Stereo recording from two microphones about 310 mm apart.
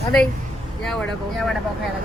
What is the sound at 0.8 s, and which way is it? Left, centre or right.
Speech, centre.